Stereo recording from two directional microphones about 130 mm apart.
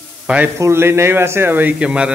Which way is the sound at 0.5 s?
20° right (ahead or behind).